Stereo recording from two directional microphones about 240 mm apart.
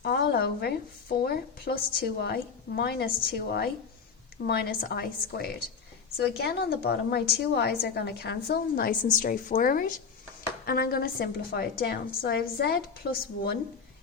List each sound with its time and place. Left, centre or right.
0.0 s a woman's voice: left